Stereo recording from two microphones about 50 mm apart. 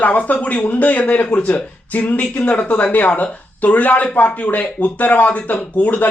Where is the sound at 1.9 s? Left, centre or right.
Left.